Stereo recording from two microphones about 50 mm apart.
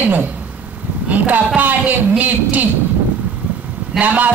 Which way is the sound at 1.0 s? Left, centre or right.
Right.